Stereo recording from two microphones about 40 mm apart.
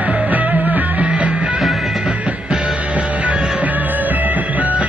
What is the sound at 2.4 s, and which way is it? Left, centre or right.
Music, right.